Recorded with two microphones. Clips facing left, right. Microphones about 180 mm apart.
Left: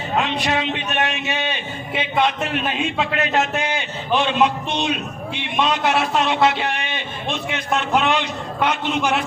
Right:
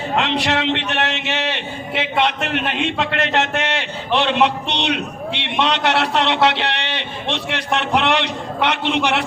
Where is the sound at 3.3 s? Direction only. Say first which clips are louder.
Right 1 dB; 80° right.